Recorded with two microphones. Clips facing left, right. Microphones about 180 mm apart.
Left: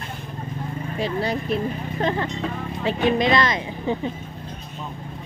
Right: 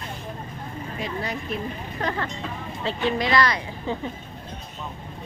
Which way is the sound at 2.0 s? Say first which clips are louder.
Left 5 dB; 20° left (ahead or behind).